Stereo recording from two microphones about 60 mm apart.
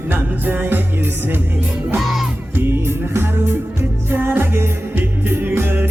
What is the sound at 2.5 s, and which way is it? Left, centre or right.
Music, right.